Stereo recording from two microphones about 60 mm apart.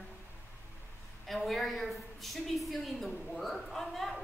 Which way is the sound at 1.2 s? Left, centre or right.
Centre.